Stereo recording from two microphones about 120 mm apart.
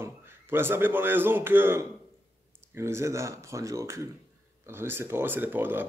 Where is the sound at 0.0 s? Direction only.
20° right (ahead or behind).